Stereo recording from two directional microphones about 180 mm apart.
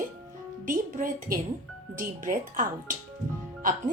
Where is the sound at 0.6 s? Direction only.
45° right (ahead or behind).